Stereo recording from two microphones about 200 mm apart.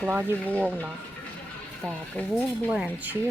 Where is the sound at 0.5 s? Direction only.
10° right (ahead or behind).